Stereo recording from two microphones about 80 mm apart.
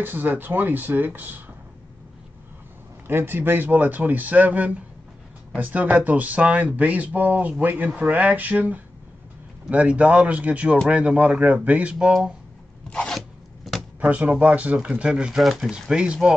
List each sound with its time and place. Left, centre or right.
0.0 s speech: right
3.1 s speech: right; by 12.4 s centre
12.9 s zipper: centre
13.7 s drawer open or close: centre
14.0 s speech: centre
15.7 s speech: centre